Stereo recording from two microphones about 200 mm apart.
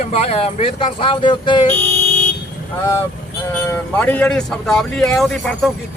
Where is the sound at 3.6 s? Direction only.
10° left (ahead or behind).